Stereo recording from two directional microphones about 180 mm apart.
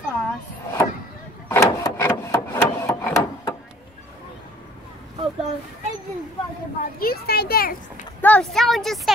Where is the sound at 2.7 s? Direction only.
15° left (ahead or behind).